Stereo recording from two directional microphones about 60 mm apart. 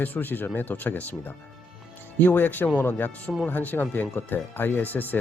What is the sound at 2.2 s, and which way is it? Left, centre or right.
Speech, left.